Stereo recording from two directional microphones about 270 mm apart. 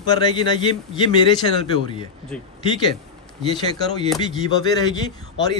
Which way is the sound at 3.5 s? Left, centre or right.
Centre.